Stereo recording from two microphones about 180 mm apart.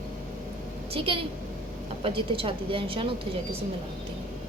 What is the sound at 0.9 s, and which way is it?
A woman's voice, 30° right (ahead or behind).